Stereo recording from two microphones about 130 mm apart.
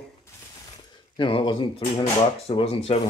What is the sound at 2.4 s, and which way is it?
Speech, 50° left (ahead or behind).